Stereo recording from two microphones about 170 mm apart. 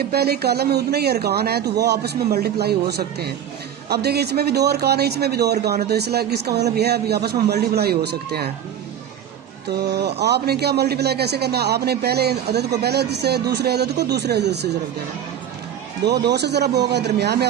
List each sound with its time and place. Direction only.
0.0 s a man's voice: 65° right (ahead or behind)
9.6 s a man's voice: 75° right (ahead or behind)
16.0 s a man's voice: 80° right